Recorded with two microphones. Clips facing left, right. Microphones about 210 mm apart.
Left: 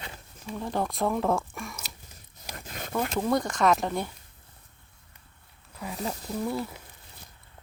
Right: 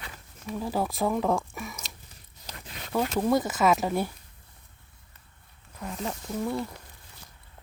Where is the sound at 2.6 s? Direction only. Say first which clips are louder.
Left 5 dB; 45° left (ahead or behind).